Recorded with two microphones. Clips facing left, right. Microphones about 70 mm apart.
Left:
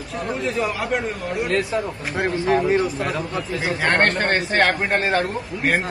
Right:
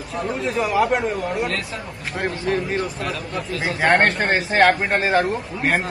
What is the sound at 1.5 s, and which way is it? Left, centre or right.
Speech, left.